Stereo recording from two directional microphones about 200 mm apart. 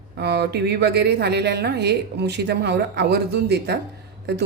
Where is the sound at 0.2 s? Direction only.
55° right (ahead or behind).